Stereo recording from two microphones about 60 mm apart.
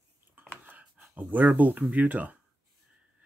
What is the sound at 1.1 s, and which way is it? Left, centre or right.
Speech, right.